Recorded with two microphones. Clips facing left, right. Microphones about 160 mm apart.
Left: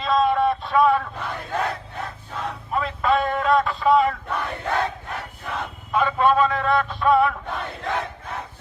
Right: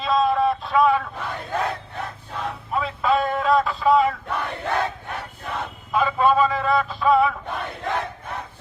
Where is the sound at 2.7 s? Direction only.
Centre (ahead or behind).